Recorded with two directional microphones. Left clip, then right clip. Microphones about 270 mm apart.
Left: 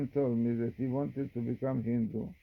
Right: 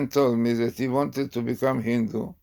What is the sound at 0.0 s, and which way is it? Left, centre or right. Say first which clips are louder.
Speech: right 10 dB; centre.